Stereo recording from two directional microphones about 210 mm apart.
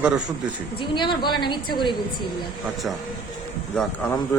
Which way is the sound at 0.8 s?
20° left (ahead or behind).